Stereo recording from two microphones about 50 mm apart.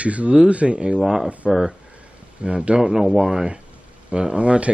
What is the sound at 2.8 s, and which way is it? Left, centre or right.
Speech, centre.